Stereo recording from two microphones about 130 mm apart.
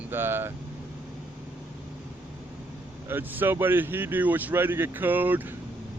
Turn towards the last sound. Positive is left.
turn(degrees=-15)  # may be behind; listen again after turning